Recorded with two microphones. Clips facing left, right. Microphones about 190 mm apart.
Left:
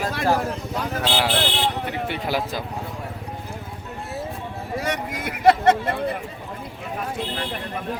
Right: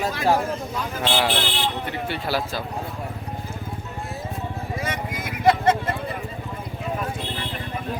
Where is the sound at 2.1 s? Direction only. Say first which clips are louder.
Right 1 dB; 20° left (ahead or behind).